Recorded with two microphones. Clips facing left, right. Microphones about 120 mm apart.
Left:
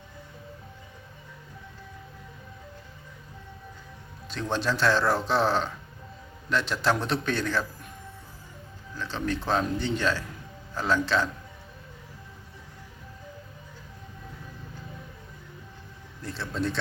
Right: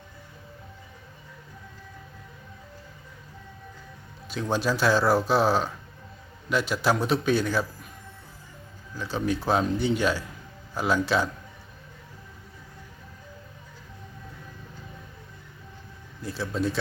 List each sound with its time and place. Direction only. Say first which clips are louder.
4.3 s a man's voice: right 2 dB; 5° right (ahead or behind)
9.0 s a man's voice: right 3 dB; 10° right (ahead or behind)
16.2 s speech: right 2 dB; 5° right (ahead or behind)